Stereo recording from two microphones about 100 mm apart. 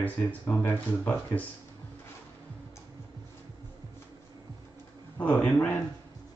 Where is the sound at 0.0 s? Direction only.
20° left (ahead or behind).